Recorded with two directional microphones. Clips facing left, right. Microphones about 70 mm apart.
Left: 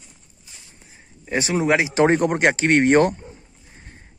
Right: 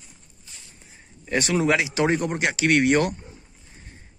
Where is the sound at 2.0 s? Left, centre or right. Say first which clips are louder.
Left 6 dB; left.